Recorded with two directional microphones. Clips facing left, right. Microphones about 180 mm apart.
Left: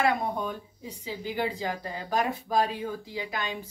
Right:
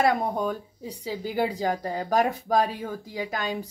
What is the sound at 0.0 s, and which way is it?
Speech, 40° right (ahead or behind).